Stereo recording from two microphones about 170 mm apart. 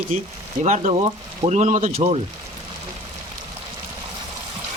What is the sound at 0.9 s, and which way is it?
Speech, 30° right (ahead or behind).